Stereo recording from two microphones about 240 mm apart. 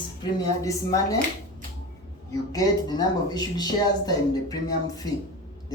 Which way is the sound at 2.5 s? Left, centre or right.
Centre.